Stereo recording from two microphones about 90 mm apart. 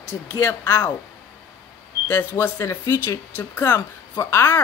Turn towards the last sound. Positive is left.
turn(degrees=30)  # may be behind; listen again after turning